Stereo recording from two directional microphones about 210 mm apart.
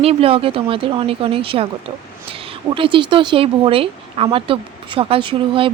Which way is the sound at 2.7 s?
25° right (ahead or behind).